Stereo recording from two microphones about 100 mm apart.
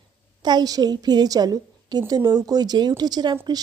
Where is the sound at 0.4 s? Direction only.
45° right (ahead or behind).